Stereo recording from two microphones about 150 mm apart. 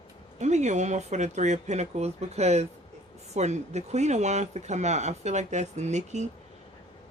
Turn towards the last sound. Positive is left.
turn(degrees=-50)  # may be behind; listen again after turning